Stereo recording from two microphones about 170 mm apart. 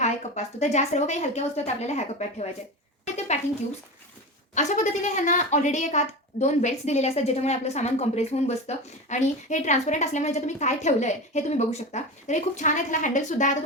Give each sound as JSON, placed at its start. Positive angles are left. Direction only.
{"t": 0.0, "sound": "a woman's voice", "side_deg": 40}
{"t": 4.5, "sound": "a woman's voice", "side_deg": 45}